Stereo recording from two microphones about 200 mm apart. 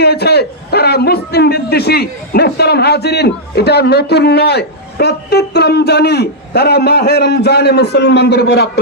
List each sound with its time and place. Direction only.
0.0 s a man's voice: 55° left (ahead or behind)